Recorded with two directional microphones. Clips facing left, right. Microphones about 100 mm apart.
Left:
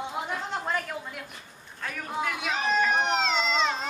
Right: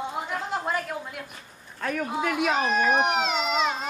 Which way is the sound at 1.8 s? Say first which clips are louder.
Right 4 dB; 55° right (ahead or behind).